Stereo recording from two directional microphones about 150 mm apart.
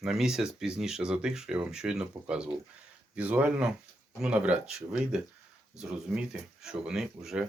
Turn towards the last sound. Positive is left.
turn(degrees=-5)  # may be behind; listen again after turning